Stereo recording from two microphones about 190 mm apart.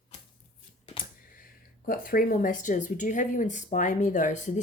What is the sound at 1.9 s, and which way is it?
A woman's voice, 50° left (ahead or behind).